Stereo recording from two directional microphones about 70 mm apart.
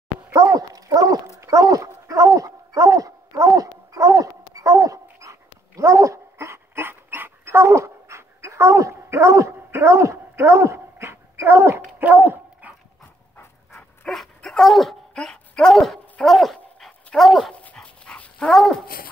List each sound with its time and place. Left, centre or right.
0.3 s dog: right
12.0 s dog: right
14.0 s dog: centre
17.7 s dog: centre
18.5 s dog: centre